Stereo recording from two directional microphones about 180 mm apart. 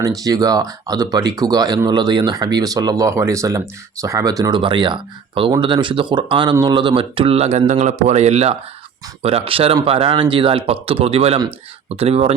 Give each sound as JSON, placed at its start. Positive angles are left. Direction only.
{"t": 0.0, "sound": "speech", "side_deg": -20}